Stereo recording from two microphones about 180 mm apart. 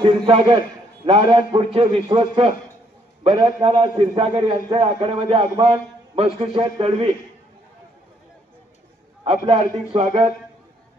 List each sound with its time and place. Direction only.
0.0 s a man's voice: 30° right (ahead or behind)
9.2 s a man's voice: 35° right (ahead or behind)